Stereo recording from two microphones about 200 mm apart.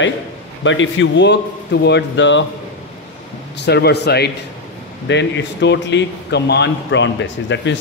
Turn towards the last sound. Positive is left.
turn(degrees=65)  # may be behind; listen again after turning